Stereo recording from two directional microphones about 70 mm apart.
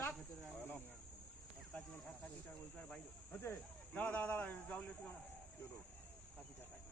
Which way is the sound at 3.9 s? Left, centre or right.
Centre.